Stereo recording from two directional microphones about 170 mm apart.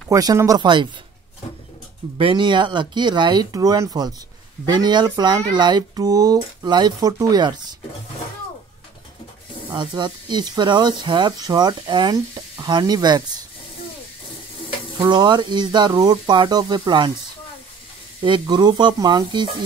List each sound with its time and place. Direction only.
0.1 s speech: 20° right (ahead or behind)
2.1 s speech: 30° right (ahead or behind)
9.8 s speech: 25° right (ahead or behind)
15.0 s speech: 25° right (ahead or behind)
18.2 s speech: 25° right (ahead or behind)